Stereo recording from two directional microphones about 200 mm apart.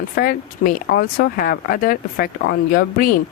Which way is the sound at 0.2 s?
45° left (ahead or behind).